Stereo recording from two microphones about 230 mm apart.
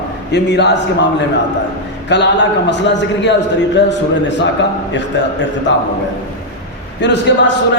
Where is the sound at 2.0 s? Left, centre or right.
Left.